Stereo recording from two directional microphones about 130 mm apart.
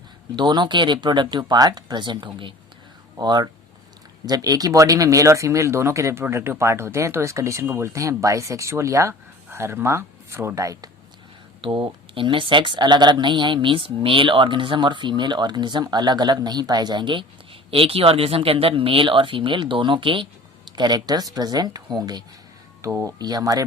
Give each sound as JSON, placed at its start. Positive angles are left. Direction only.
{"t": 0.3, "sound": "speech", "side_deg": -35}
{"t": 11.6, "sound": "speech", "side_deg": -40}